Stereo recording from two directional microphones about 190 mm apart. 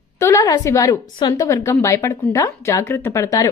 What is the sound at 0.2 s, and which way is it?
A woman's voice, 15° left (ahead or behind).